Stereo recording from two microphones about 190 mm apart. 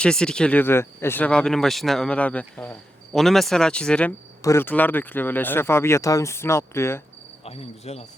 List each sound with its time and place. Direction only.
0.0 s speech: 5° left (ahead or behind)
7.4 s cricket: 30° left (ahead or behind)